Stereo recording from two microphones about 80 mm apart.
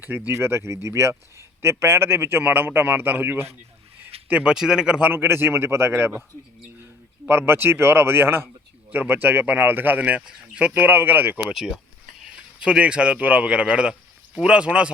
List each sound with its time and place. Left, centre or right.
0.0 s speech: right
4.3 s a man's voice: centre
5.1 s speech: right
7.3 s speech: right; by 10.7 s centre
10.8 s speech: right
11.5 s a man's voice: centre